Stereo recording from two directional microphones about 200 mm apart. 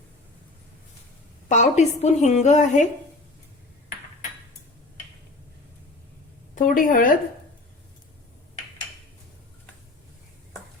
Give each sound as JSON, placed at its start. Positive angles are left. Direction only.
{"t": 1.5, "sound": "a woman's voice", "side_deg": 35}
{"t": 6.5, "sound": "a woman's voice", "side_deg": 40}